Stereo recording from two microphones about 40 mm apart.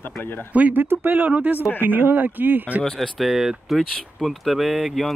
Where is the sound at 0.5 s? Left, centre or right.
Right.